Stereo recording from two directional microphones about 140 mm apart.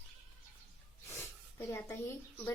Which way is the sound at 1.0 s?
20° left (ahead or behind).